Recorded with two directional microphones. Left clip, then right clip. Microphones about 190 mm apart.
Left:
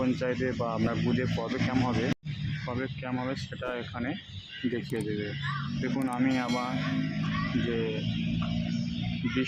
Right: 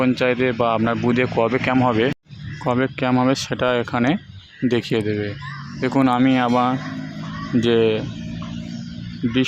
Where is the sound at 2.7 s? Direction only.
60° right (ahead or behind).